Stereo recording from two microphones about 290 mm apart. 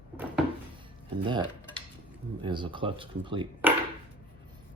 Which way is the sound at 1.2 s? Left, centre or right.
Centre.